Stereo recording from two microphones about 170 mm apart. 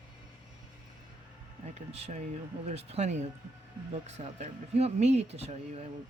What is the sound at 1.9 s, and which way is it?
Speech, 40° right (ahead or behind).